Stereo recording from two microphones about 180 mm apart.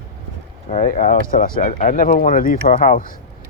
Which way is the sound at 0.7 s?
45° left (ahead or behind).